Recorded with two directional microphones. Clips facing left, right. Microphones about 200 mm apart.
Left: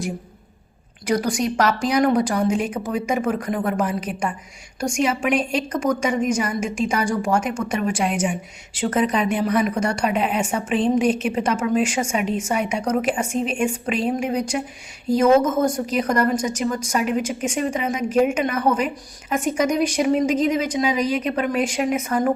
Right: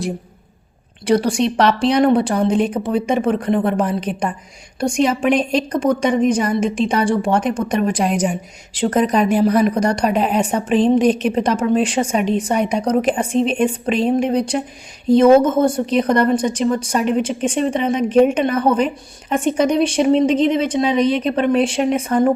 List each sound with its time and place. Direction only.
1.0 s a woman's voice: 30° right (ahead or behind)